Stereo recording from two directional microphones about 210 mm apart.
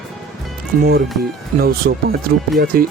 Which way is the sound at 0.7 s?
40° right (ahead or behind).